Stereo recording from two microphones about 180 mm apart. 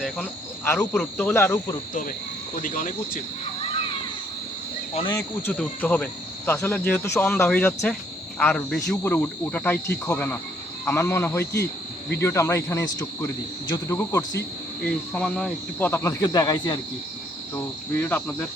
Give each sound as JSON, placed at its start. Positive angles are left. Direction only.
{"t": 0.6, "sound": "speech", "side_deg": 15}
{"t": 1.9, "sound": "speech", "side_deg": 45}
{"t": 5.1, "sound": "speech", "side_deg": 10}
{"t": 14.8, "sound": "speech", "side_deg": 5}
{"t": 17.5, "sound": "speech", "side_deg": 10}